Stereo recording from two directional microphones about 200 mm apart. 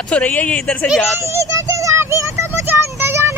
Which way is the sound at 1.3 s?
15° right (ahead or behind).